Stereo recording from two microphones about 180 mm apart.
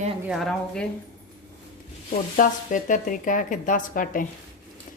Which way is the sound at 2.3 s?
50° left (ahead or behind).